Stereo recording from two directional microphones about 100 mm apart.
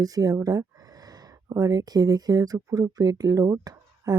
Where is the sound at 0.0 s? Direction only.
35° right (ahead or behind).